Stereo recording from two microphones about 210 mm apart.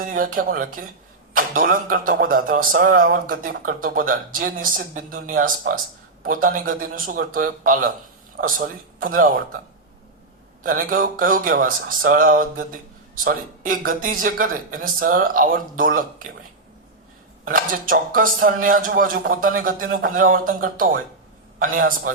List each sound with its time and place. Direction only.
0.0 s speech: 40° right (ahead or behind)
10.6 s speech: 40° right (ahead or behind)
17.4 s speech: 40° right (ahead or behind)